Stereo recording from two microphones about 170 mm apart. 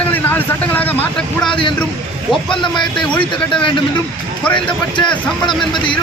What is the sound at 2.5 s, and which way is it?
Speech, 30° left (ahead or behind).